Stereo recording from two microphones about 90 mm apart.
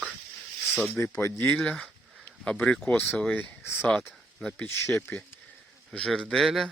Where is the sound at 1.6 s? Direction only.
5° left (ahead or behind).